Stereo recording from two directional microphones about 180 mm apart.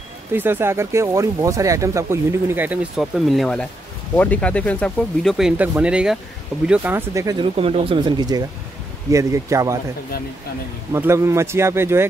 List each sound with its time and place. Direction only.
0.3 s speech: 10° right (ahead or behind)
7.5 s speech: 30° right (ahead or behind)
10.9 s speech: 15° right (ahead or behind)